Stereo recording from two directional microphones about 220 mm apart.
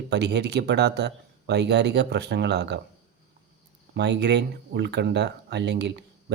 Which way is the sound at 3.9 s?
50° right (ahead or behind).